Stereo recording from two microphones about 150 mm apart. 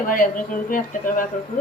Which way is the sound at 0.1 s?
65° left (ahead or behind).